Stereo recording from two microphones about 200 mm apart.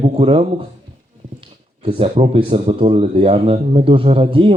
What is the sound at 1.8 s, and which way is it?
Speech, 25° right (ahead or behind).